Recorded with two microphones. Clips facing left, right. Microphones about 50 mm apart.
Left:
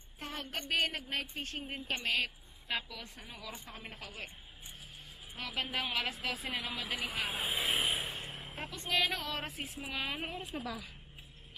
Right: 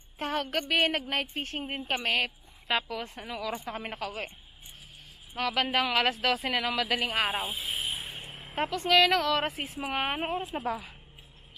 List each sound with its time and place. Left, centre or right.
0.2 s a woman's voice: right
5.3 s speech: right
6.5 s speech: right
7.3 s speech: centre
7.8 s a sound: centre
8.1 s a sound: centre
8.5 s speech: right
9.4 s a woman's voice: right